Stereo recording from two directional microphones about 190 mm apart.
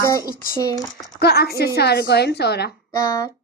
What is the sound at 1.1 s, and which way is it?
Speech, 55° left (ahead or behind).